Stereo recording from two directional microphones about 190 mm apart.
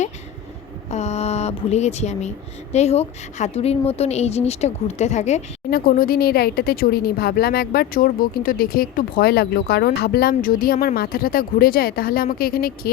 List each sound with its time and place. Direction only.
0.9 s a woman's voice: 35° left (ahead or behind)
5.7 s speech: 50° left (ahead or behind)